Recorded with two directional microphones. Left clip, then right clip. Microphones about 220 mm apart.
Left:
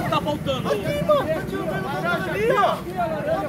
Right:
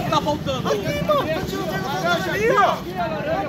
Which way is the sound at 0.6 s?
50° left (ahead or behind).